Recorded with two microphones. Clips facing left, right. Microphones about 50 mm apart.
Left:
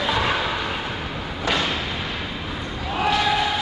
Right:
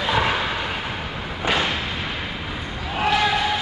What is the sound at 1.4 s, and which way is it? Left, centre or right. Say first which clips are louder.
Thump: right 1 dB; centre.